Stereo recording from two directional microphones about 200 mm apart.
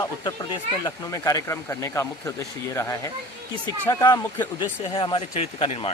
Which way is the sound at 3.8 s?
20° left (ahead or behind).